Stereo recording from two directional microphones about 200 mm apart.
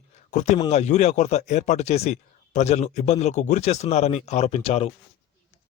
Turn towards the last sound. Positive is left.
turn(degrees=30)  # may be behind; listen again after turning